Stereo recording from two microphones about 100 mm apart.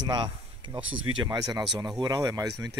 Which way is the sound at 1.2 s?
40° right (ahead or behind).